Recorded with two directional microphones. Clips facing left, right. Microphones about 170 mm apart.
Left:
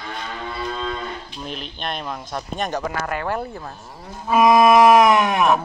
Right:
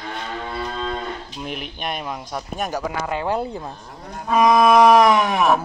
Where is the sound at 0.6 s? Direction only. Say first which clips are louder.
Left 1 dB; 40° right (ahead or behind).